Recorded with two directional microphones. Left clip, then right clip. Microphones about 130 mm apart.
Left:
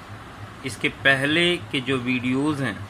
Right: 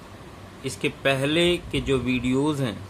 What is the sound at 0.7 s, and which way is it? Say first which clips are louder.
Speech: left 4 dB; 30° right (ahead or behind).